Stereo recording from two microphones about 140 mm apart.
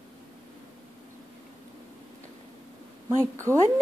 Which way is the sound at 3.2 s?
20° right (ahead or behind).